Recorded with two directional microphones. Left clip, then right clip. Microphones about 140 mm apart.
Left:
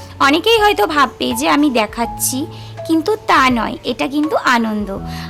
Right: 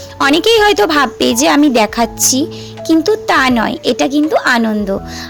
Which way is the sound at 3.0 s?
15° right (ahead or behind).